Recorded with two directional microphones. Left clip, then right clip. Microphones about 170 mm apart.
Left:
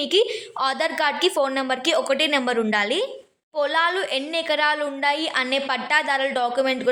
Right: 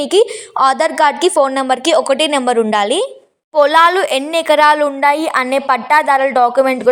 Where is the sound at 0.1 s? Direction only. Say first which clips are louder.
Right 8 dB; 40° right (ahead or behind).